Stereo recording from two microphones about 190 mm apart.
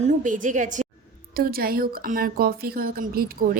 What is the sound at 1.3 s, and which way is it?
A woman's voice, 50° right (ahead or behind).